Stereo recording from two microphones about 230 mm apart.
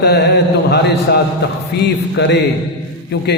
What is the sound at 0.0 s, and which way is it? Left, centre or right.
Mantra, left.